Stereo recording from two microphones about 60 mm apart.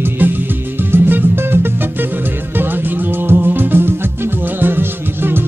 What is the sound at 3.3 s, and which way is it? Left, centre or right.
Music, right.